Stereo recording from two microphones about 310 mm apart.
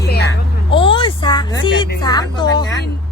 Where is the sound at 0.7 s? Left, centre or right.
Centre.